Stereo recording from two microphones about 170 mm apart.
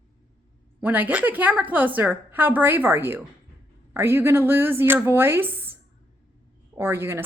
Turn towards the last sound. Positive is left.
turn(degrees=-15)  # may be behind; listen again after turning